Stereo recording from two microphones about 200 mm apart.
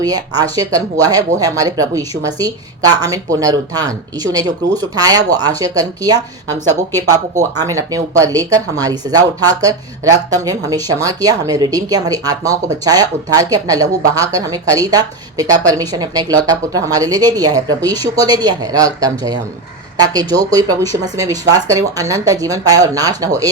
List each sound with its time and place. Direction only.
0.0 s speech: 20° right (ahead or behind)
7.6 s speech: 15° right (ahead or behind)